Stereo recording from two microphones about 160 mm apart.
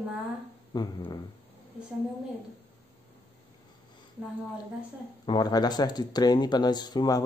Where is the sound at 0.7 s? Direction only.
25° left (ahead or behind).